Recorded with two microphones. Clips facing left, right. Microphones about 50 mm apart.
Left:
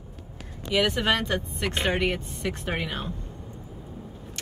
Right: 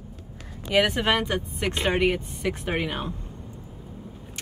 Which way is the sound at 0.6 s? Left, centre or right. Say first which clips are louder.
Right 2 dB; right.